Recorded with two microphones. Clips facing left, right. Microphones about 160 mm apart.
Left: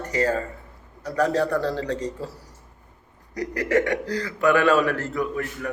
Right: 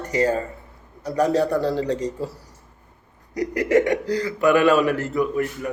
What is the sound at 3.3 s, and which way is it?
Speech, 15° right (ahead or behind).